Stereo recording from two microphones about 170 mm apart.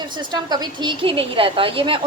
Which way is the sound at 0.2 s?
25° right (ahead or behind).